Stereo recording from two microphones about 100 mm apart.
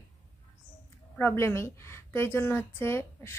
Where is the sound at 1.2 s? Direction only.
25° left (ahead or behind).